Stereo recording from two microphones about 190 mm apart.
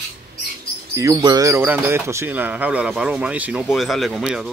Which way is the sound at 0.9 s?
20° right (ahead or behind).